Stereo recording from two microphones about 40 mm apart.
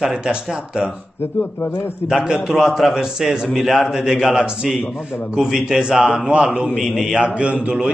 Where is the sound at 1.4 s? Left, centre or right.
Left.